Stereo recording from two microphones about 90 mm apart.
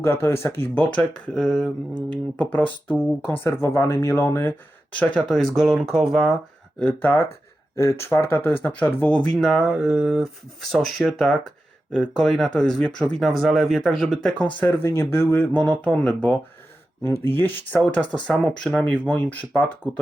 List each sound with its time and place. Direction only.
0.0 s speech: 30° left (ahead or behind)
1.3 s speech: 5° left (ahead or behind)
2.0 s speech: 15° left (ahead or behind)
3.4 s speech: 30° left (ahead or behind)
4.9 s speech: 15° left (ahead or behind)
5.3 s speech: 5° left (ahead or behind)
7.0 s speech: 20° left (ahead or behind)
7.8 s speech: 30° left (ahead or behind); by 14.4 s 5° left (ahead or behind)
14.6 s speech: 25° left (ahead or behind)
17.1 s speech: 30° left (ahead or behind)
18.1 s speech: 10° left (ahead or behind)